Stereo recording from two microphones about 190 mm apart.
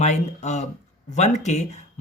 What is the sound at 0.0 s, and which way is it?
A man's voice, 35° left (ahead or behind).